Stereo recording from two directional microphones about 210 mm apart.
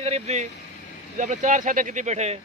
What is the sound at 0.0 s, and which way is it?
Speech, 30° right (ahead or behind).